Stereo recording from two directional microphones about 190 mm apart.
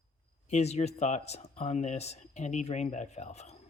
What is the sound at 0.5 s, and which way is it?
Speech, 35° left (ahead or behind).